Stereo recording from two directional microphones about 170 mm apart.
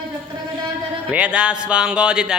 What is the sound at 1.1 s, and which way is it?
Music, 5° right (ahead or behind).